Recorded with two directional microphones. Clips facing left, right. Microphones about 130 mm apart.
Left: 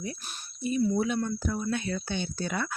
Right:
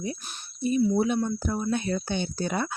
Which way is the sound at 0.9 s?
25° right (ahead or behind).